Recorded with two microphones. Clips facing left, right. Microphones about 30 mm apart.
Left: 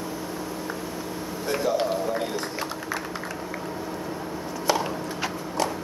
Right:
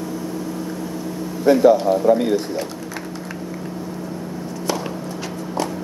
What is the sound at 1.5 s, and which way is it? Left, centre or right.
Speech, right.